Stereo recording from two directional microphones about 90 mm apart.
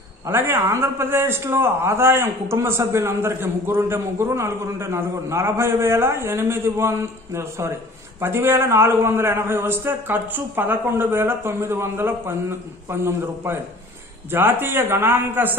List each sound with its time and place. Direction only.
0.3 s a man's voice: 30° right (ahead or behind)